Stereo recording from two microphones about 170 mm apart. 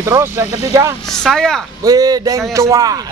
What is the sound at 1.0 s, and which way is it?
Speech, centre (ahead or behind).